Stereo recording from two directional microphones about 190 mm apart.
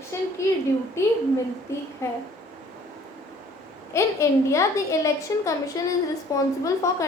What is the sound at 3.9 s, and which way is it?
A woman's voice, 15° left (ahead or behind).